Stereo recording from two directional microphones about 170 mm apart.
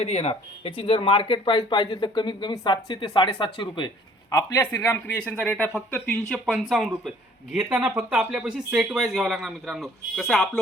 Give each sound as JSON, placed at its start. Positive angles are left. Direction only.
{"t": 0.0, "sound": "speech", "side_deg": 40}
{"t": 5.2, "sound": "speech", "side_deg": 5}